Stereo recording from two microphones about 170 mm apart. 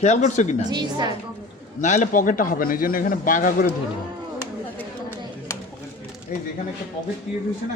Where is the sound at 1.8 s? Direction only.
45° left (ahead or behind).